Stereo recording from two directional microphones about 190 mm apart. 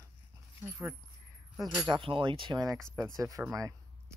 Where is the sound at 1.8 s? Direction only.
25° right (ahead or behind).